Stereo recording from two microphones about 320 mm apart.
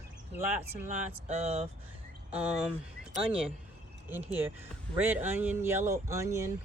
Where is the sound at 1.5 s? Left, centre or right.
Centre.